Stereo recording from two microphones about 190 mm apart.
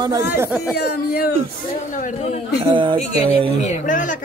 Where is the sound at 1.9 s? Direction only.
40° left (ahead or behind).